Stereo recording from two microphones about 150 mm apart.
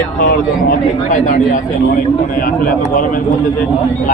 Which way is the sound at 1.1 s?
60° left (ahead or behind).